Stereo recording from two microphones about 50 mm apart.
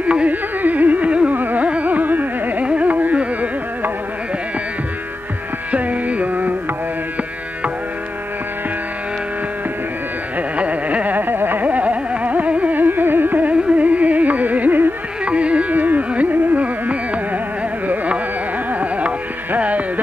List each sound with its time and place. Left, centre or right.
0.0 s carnatic music: right
1.3 s carnatic music: right
5.7 s music: right
10.6 s carnatic music: right
15.2 s carnatic music: right
17.8 s classical music: right
18.7 s music: right